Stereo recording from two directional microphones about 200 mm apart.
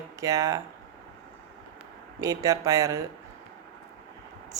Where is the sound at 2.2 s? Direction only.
15° right (ahead or behind).